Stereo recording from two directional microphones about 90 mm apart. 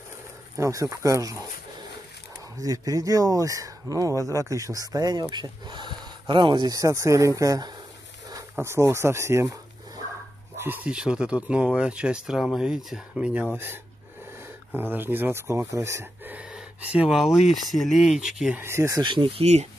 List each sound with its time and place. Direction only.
0.6 s speech: 35° right (ahead or behind)
2.6 s speech: 40° right (ahead or behind)
5.3 s speech: 55° right (ahead or behind)
6.8 s speech: 35° right (ahead or behind)
8.5 s speech: 30° right (ahead or behind)
10.6 s speech: 25° right (ahead or behind)
10.9 s speech: 10° right (ahead or behind)
14.7 s speech: 20° right (ahead or behind)
16.3 s speech: 10° right (ahead or behind)
18.6 s speech: 30° right (ahead or behind)
18.9 s speech: 60° right (ahead or behind)